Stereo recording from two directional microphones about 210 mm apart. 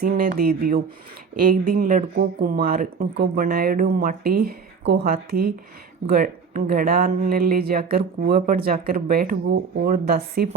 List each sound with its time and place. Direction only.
0.0 s speech: 40° right (ahead or behind)